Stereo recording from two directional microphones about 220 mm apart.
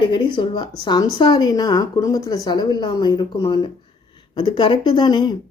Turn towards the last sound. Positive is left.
turn(degrees=20)  # may be behind; listen again after turning